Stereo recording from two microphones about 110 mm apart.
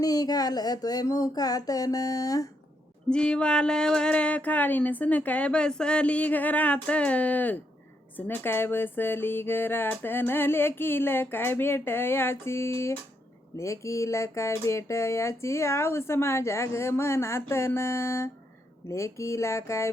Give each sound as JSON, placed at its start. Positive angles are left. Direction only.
{"t": 0.0, "sound": "speech", "side_deg": 35}
{"t": 3.1, "sound": "a sound", "side_deg": 10}
{"t": 8.1, "sound": "speech", "side_deg": 20}